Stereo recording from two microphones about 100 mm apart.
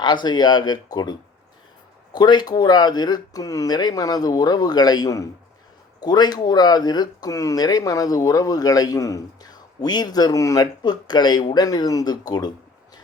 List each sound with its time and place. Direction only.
0.0 s speech: 50° left (ahead or behind)
2.1 s speech: 45° left (ahead or behind)
6.0 s speech: 45° left (ahead or behind)